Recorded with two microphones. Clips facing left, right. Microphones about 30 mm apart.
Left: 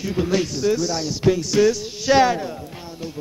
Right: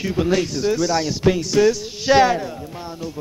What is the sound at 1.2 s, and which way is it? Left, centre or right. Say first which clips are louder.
Speech: left 2 dB; centre.